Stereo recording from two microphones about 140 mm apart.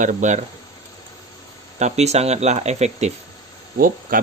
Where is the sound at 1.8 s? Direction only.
50° right (ahead or behind).